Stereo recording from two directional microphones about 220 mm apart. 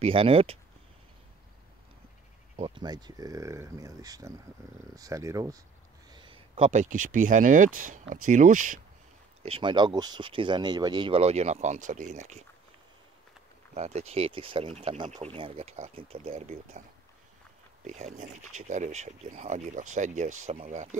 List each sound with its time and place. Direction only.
0.0 s speech: 25° right (ahead or behind)
2.5 s speech: 25° right (ahead or behind)
9.5 s speech: 20° right (ahead or behind)
13.7 s speech: 30° right (ahead or behind)
17.8 s speech: 35° right (ahead or behind)